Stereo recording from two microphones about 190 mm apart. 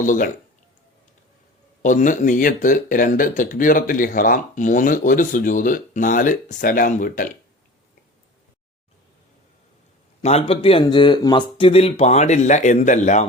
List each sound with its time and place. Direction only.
0.0 s speech: 40° left (ahead or behind)
1.8 s speech: 40° left (ahead or behind)
10.2 s speech: 30° left (ahead or behind)